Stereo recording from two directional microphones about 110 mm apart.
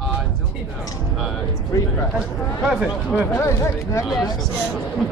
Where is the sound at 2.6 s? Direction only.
5° right (ahead or behind).